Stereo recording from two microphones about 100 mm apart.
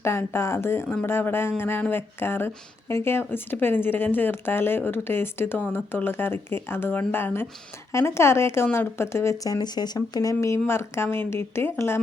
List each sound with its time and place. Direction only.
0.0 s speech: 25° left (ahead or behind)